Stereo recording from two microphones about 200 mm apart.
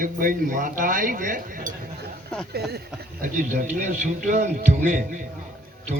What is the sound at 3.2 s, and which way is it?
A man's voice, 40° right (ahead or behind).